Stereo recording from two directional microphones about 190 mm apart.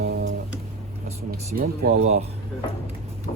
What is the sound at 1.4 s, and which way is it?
Speech, 50° right (ahead or behind).